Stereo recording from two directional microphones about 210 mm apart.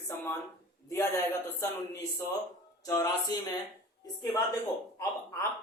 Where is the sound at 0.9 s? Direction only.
15° left (ahead or behind).